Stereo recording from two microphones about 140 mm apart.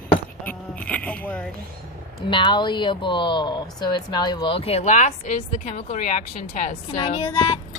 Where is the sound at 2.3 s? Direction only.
35° left (ahead or behind); by 6.7 s 65° left (ahead or behind).